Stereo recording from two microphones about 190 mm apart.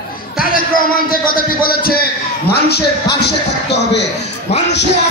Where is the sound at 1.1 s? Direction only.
50° left (ahead or behind).